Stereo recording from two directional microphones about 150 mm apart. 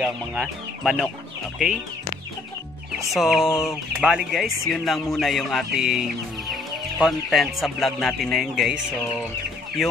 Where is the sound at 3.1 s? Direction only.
Centre (ahead or behind).